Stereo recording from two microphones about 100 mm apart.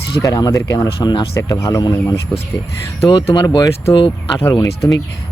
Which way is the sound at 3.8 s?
65° left (ahead or behind).